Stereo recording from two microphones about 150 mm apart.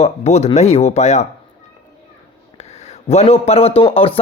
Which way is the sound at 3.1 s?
40° left (ahead or behind).